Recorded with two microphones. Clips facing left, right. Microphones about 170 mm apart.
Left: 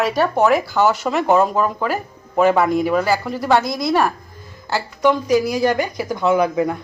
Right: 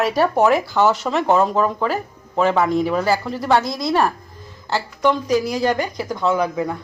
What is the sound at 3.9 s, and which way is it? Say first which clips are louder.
Speech: even; 5° left (ahead or behind).